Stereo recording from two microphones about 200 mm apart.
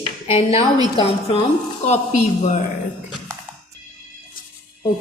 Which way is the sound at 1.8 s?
35° left (ahead or behind).